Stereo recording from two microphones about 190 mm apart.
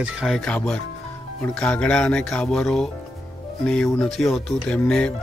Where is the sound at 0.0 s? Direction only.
Centre (ahead or behind).